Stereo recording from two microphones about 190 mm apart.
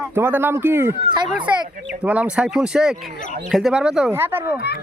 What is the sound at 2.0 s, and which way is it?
Speech, 5° right (ahead or behind).